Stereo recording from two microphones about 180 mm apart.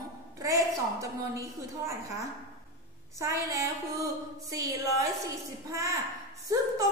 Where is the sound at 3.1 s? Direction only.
15° right (ahead or behind).